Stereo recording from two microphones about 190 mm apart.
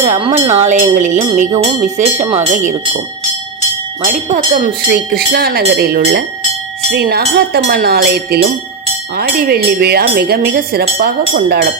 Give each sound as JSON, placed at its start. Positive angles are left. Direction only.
{"t": 0.0, "sound": "speech", "side_deg": -40}
{"t": 4.0, "sound": "speech", "side_deg": -40}
{"t": 4.9, "sound": "speech", "side_deg": -55}